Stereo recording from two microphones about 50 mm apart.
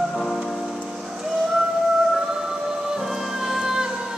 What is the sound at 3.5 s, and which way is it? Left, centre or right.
Music, centre.